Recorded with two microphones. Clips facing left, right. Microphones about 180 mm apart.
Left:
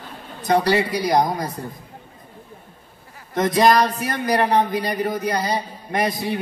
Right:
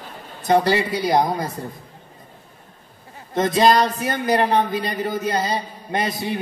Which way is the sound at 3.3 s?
25° right (ahead or behind).